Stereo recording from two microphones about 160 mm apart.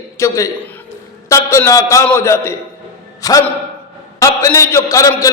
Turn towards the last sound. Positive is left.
turn(degrees=20)  # may be behind; listen again after turning